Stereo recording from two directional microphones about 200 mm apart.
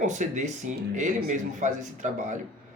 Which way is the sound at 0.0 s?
40° right (ahead or behind).